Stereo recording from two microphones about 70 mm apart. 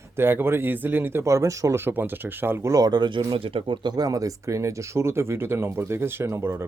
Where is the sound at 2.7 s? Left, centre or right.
Right.